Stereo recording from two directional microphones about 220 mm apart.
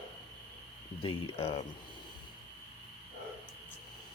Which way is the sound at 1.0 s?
25° left (ahead or behind).